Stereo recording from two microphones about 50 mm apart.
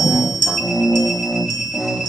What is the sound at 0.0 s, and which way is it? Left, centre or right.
Music, centre.